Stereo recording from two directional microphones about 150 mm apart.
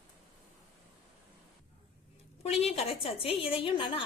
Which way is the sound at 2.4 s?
45° left (ahead or behind).